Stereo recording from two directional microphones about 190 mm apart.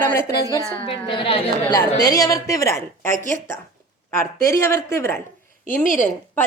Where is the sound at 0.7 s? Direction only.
25° left (ahead or behind).